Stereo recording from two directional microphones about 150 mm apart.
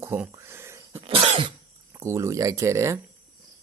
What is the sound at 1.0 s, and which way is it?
Cough, 40° right (ahead or behind).